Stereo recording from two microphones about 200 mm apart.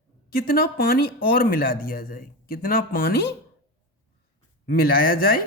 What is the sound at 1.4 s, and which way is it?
Speech, 45° left (ahead or behind).